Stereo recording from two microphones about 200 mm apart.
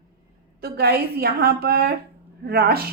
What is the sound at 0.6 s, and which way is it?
A woman's voice, 50° right (ahead or behind).